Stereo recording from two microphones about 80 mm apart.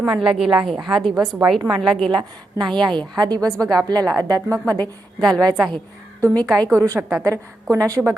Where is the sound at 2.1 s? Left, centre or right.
Right.